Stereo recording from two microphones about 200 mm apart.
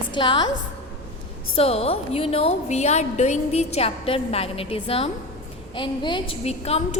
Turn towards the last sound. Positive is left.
turn(degrees=30)  # may be behind; listen again after turning